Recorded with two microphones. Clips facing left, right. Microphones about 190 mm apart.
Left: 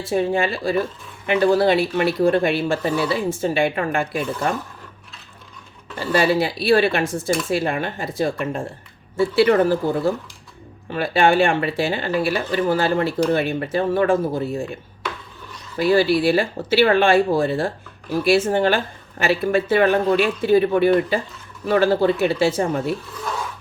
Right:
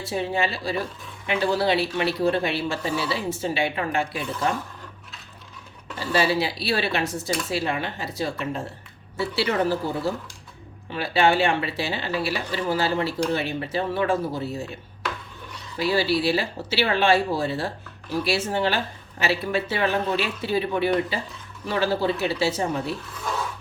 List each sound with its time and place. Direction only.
0.0 s speech: 50° left (ahead or behind)
6.1 s speech: 50° left (ahead or behind)
15.8 s speech: 50° left (ahead or behind)